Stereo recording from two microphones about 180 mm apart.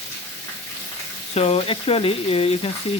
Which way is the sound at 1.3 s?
35° left (ahead or behind).